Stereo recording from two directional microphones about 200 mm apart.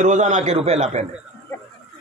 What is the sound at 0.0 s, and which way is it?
A man's voice, 35° right (ahead or behind).